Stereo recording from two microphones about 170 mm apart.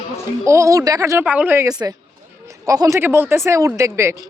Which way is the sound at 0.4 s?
15° right (ahead or behind).